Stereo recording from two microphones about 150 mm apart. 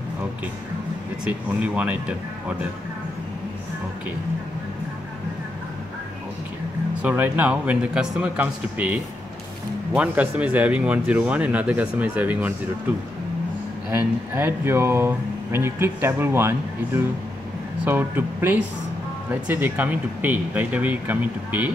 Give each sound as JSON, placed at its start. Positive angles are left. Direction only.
{"t": 1.2, "sound": "speech", "side_deg": -10}
{"t": 7.0, "sound": "speech", "side_deg": -10}
{"t": 13.8, "sound": "speech", "side_deg": -15}